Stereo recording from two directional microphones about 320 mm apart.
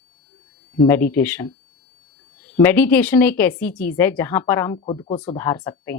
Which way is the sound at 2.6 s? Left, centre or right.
Centre.